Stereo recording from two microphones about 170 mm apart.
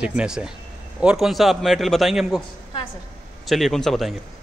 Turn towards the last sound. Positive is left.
turn(degrees=0)  # may be behind; listen again after turning